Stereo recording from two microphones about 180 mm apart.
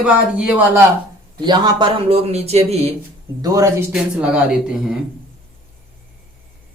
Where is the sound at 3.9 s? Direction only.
5° right (ahead or behind).